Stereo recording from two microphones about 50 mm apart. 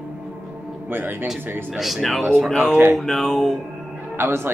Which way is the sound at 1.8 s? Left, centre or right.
Centre.